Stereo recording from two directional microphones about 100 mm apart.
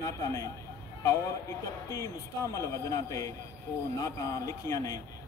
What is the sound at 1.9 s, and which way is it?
A man's voice, 35° left (ahead or behind).